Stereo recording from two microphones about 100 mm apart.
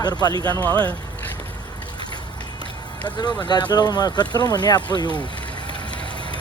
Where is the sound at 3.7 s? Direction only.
40° left (ahead or behind).